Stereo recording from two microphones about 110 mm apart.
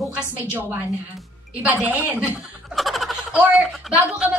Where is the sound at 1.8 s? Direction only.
15° right (ahead or behind).